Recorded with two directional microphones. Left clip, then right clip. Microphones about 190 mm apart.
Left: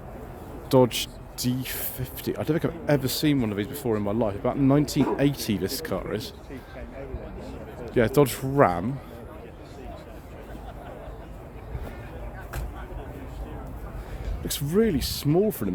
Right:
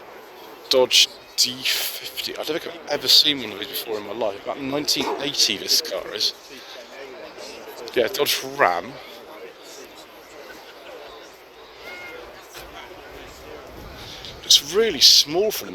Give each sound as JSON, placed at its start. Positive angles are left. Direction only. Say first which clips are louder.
{"t": 0.7, "sound": "speech", "louder": "right 5 dB", "side_deg": 25}
{"t": 7.9, "sound": "speech", "louder": "right 1 dB", "side_deg": 20}
{"t": 14.7, "sound": "speech", "louder": "right 4 dB", "side_deg": 10}